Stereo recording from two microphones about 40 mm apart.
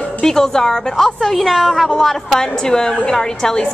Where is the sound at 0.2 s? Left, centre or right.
Centre.